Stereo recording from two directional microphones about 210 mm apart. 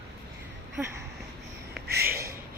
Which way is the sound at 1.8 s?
45° right (ahead or behind).